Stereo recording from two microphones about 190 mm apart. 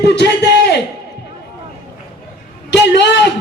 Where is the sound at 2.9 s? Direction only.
65° left (ahead or behind).